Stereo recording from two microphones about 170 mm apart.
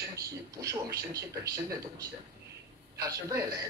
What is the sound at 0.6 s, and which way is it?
A man's voice, 20° right (ahead or behind).